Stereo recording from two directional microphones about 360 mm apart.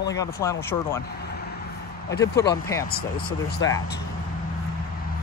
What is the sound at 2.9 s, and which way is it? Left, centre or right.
Speech, left.